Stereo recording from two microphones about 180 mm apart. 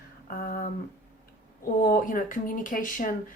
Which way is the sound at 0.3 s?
50° left (ahead or behind).